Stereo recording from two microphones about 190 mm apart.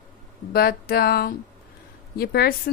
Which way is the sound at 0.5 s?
55° left (ahead or behind).